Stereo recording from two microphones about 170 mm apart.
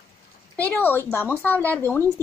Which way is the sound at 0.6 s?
10° left (ahead or behind).